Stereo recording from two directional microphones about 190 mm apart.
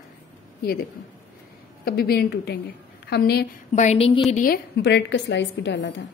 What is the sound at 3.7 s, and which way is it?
Speech, 35° left (ahead or behind).